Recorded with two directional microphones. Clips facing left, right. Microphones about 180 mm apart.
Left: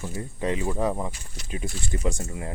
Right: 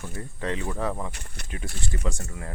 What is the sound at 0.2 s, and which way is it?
Speech, 15° left (ahead or behind).